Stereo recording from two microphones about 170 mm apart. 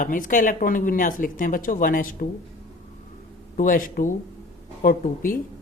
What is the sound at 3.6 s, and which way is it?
A woman's voice, 55° left (ahead or behind).